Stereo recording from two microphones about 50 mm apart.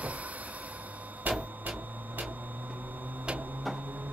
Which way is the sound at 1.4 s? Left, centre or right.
Right.